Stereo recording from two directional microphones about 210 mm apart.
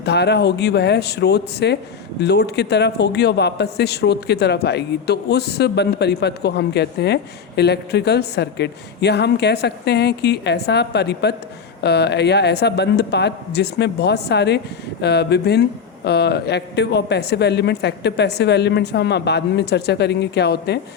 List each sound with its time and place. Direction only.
0.0 s a man's voice: 55° left (ahead or behind)